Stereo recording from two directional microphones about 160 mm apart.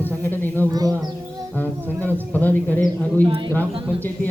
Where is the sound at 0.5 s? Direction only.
25° right (ahead or behind).